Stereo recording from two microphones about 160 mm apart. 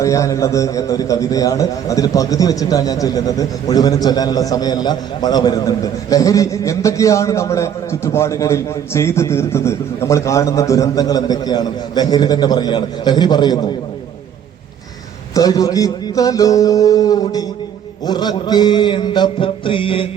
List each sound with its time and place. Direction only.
0.0 s a man's voice: 20° left (ahead or behind)
15.4 s a man's voice: 20° left (ahead or behind)